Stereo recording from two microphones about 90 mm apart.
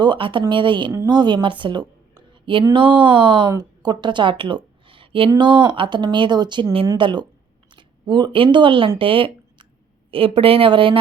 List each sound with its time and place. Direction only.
0.0 s speech: 60° right (ahead or behind)
5.4 s speech: 60° right (ahead or behind)
7.7 s a sound: 60° right (ahead or behind)
8.5 s speech: 65° right (ahead or behind)
10.1 s speech: 85° right